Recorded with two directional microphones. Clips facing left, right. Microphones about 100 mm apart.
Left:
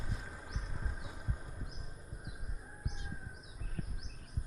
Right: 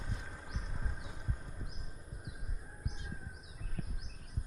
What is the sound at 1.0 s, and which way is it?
Vehicle, 5° left (ahead or behind).